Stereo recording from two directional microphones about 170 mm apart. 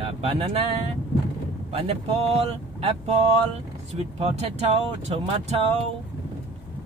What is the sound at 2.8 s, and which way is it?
Speech, 40° right (ahead or behind).